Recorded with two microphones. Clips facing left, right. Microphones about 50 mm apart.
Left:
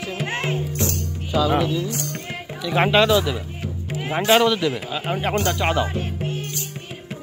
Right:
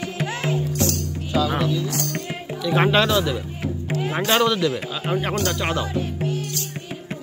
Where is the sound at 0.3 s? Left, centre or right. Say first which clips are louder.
Left 1 dB; left.